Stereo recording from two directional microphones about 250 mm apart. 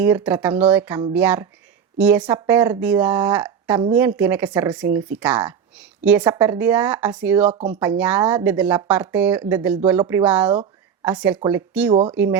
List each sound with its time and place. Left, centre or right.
0.0 s speech: centre
11.9 s speech: right
12.1 s speech: centre